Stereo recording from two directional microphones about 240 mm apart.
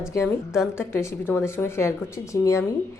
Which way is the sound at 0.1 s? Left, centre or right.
Centre.